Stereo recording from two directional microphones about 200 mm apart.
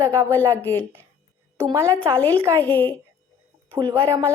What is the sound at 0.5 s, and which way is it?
Speech, 10° left (ahead or behind).